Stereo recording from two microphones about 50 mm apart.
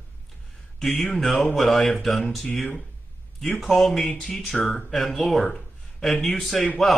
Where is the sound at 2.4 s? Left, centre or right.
Centre.